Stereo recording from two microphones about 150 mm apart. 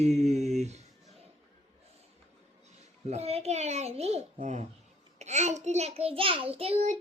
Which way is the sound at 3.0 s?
45° right (ahead or behind).